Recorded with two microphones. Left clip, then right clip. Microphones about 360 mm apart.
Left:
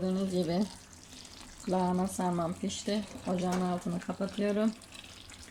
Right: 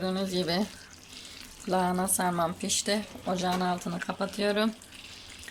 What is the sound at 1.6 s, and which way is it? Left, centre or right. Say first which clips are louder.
Speech: right 4 dB; right.